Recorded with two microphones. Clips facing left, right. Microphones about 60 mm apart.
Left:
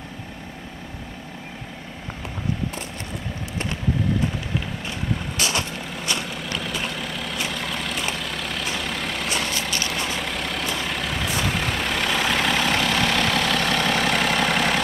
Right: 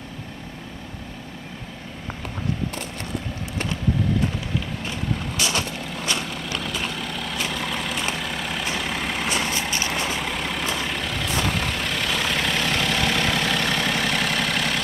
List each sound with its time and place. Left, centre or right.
6.1 s vehicle: centre
9.5 s vehicle: right
10.2 s vehicle: centre
12.8 s vehicle: centre